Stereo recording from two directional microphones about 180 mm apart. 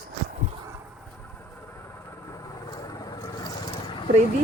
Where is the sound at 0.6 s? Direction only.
15° right (ahead or behind); by 4.1 s 25° left (ahead or behind).